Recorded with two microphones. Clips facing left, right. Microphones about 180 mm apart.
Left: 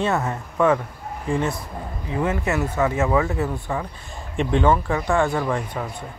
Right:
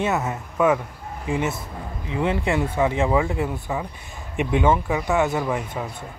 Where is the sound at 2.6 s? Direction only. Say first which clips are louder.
Even; 10° right (ahead or behind).